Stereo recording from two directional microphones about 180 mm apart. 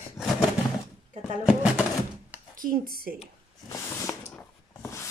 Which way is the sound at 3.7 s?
15° left (ahead or behind).